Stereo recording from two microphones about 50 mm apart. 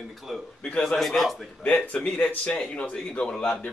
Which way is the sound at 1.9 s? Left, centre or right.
Left.